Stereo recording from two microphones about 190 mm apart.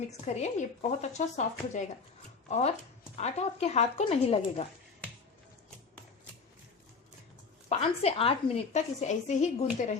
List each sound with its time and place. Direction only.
0.1 s a woman's voice: 35° left (ahead or behind)
7.7 s a woman's voice: 30° left (ahead or behind)